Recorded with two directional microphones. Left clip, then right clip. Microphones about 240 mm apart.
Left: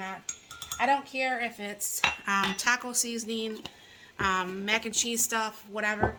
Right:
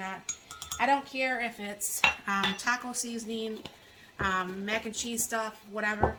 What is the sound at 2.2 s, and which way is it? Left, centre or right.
A woman's voice, left.